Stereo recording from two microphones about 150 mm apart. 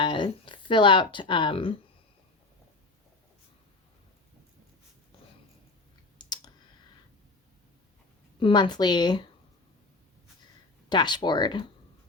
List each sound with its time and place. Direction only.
0.0 s speech: 35° left (ahead or behind)
6.1 s clicking: 30° left (ahead or behind)
8.4 s a woman's voice: 35° left (ahead or behind)
10.8 s a woman's voice: 30° left (ahead or behind)